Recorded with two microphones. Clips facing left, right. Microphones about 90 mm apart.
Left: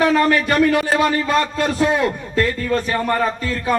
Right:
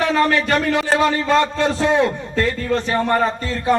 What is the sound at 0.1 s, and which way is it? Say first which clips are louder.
A man's voice: left 1 dB; 30° right (ahead or behind).